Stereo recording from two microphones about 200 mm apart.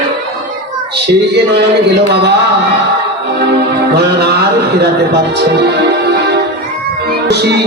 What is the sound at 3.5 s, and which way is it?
Music, 55° right (ahead or behind).